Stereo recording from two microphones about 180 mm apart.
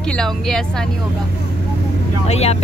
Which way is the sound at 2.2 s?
35° left (ahead or behind).